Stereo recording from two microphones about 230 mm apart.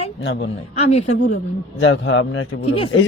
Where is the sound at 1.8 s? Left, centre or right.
Left.